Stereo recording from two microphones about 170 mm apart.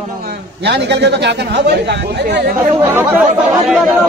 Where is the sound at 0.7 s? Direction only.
80° right.